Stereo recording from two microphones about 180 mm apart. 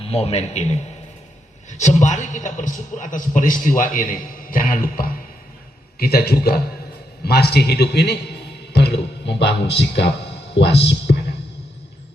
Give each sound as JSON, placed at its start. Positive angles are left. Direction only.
{"t": 0.0, "sound": "a man's voice", "side_deg": 35}